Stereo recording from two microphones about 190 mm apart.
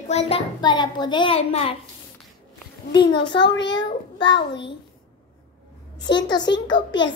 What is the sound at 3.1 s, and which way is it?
A child's voice, 25° left (ahead or behind).